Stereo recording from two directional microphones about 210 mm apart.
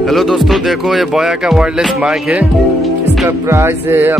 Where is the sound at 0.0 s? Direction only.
Centre (ahead or behind).